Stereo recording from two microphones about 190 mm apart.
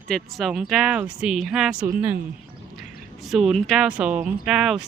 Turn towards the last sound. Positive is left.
turn(degrees=0)  # may be behind; listen again after turning